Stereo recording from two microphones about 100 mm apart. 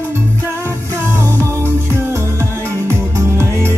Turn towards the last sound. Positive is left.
turn(degrees=-25)  # may be behind; listen again after turning